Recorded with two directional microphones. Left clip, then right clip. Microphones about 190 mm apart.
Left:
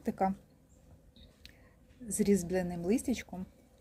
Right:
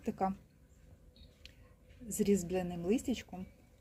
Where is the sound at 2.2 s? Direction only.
10° left (ahead or behind).